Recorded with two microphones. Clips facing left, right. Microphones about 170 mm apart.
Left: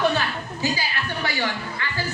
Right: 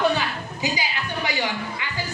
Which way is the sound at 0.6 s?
15° right (ahead or behind).